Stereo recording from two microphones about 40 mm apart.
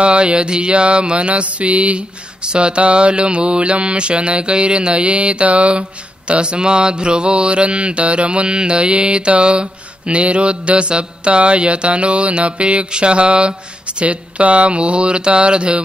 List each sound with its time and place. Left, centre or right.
0.0 s mantra: right